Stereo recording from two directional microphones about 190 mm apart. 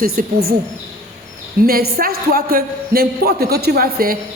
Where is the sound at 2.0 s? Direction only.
50° right (ahead or behind).